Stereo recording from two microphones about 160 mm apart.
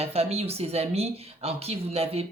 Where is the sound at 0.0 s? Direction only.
40° right (ahead or behind).